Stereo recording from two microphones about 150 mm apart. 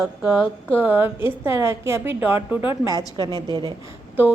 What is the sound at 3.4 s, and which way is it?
Speech, 30° right (ahead or behind).